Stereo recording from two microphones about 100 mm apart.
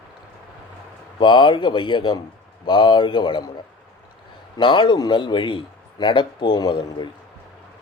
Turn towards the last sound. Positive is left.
turn(degrees=45)  # may be behind; listen again after turning